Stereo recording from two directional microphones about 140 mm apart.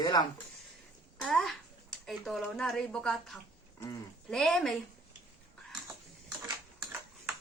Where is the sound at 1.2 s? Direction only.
Centre (ahead or behind).